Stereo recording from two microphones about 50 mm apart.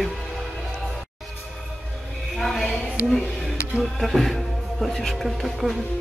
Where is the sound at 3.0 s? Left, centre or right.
Left.